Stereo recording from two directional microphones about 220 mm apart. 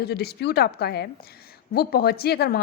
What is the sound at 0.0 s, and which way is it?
A woman's voice, 45° left (ahead or behind).